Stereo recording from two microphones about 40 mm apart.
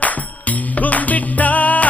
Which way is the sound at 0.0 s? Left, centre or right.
Left.